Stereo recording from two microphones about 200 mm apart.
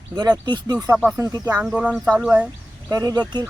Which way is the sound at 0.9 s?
5° right (ahead or behind).